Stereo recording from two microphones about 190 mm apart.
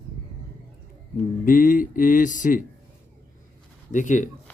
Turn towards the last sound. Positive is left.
turn(degrees=40)  # may be behind; listen again after turning